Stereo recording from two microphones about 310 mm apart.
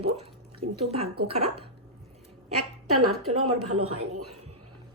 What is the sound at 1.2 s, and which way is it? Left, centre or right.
Speech, centre.